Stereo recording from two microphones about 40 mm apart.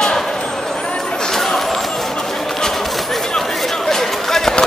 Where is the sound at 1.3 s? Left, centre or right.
Centre.